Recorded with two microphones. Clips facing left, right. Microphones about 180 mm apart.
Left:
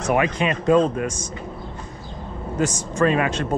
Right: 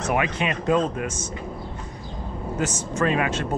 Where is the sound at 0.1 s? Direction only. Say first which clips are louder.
Left 4 dB; 35° left (ahead or behind).